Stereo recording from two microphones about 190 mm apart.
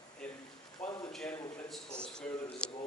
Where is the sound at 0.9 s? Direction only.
20° left (ahead or behind).